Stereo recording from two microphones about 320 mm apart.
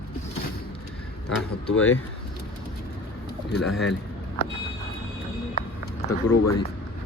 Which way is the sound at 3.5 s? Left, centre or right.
Left.